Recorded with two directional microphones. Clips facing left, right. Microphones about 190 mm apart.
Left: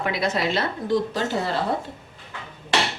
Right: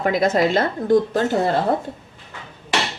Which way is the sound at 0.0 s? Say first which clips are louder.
Right 6 dB; 45° right (ahead or behind).